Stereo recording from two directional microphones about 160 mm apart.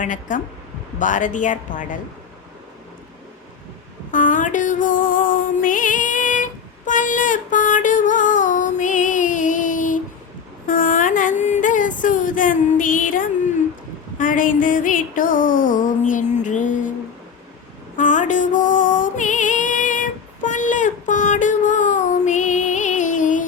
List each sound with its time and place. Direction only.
0.0 s speech: 55° left (ahead or behind)
4.1 s music: 55° left (ahead or behind)
10.7 s a sound: 60° left (ahead or behind)
14.2 s music: 55° left (ahead or behind)
17.9 s music: 50° left (ahead or behind)